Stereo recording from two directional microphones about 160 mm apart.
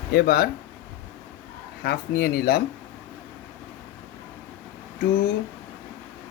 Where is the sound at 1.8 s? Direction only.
80° left.